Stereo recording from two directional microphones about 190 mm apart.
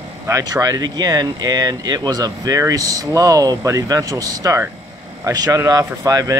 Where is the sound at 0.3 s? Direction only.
20° right (ahead or behind).